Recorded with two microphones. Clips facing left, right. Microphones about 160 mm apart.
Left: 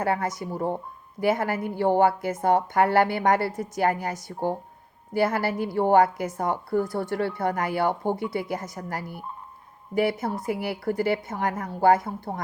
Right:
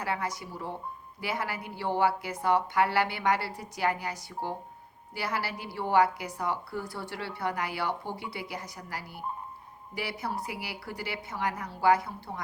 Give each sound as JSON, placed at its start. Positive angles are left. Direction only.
{"t": 0.0, "sound": "a woman's voice", "side_deg": 50}